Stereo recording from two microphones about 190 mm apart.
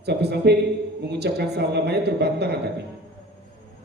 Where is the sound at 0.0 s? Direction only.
60° right (ahead or behind).